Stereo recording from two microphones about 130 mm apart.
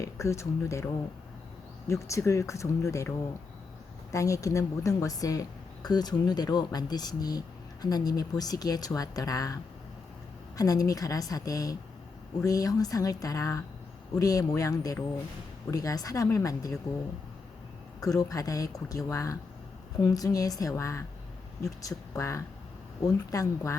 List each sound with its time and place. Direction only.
0.0 s a woman's voice: 25° left (ahead or behind)
1.9 s a woman's voice: 25° left (ahead or behind)
4.1 s a woman's voice: 25° left (ahead or behind)
10.6 s a woman's voice: 30° left (ahead or behind)
18.0 s a woman's voice: 25° left (ahead or behind)